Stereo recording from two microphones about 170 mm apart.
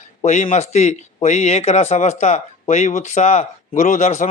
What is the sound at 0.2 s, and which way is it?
Speech, 35° left (ahead or behind).